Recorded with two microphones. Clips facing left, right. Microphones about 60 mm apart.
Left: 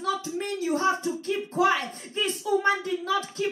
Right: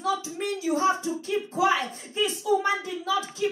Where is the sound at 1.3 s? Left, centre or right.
Left.